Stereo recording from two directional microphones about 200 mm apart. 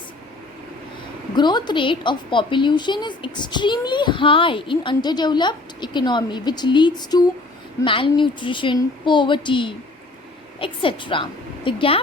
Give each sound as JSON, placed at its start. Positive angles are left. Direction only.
{"t": 1.4, "sound": "a woman's voice", "side_deg": 20}